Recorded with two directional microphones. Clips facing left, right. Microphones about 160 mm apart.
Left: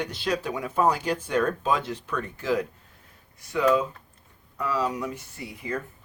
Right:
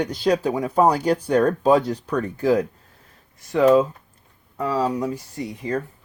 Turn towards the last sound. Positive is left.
turn(degrees=-35)  # may be behind; listen again after turning